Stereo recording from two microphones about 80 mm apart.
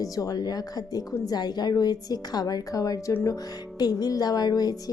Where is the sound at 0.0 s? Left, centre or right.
Left.